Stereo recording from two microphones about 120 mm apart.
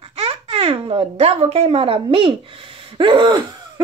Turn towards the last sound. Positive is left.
turn(degrees=-40)  # may be behind; listen again after turning